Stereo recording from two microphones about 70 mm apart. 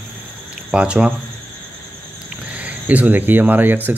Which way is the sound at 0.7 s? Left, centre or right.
Centre.